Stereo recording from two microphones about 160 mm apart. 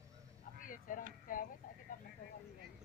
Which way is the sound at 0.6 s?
55° left (ahead or behind).